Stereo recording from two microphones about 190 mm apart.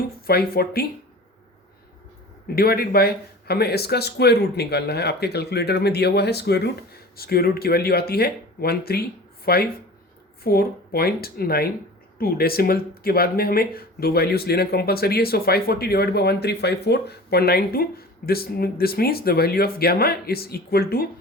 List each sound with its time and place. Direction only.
0.0 s speech: 55° left (ahead or behind)
2.6 s speech: 55° left (ahead or behind)